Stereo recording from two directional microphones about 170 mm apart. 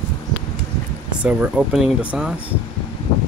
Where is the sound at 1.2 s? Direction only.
10° right (ahead or behind).